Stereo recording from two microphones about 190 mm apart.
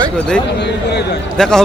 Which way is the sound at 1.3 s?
5° left (ahead or behind).